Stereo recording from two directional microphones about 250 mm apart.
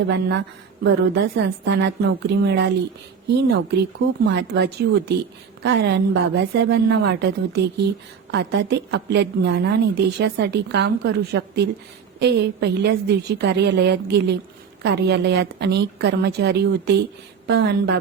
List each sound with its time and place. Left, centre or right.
0.1 s a woman's voice: right